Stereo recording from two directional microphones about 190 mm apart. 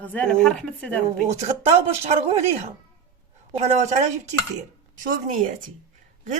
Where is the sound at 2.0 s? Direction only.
35° right (ahead or behind).